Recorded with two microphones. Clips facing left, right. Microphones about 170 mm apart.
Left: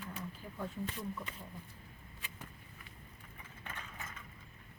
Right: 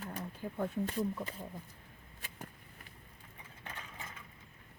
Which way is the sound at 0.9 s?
35° right (ahead or behind).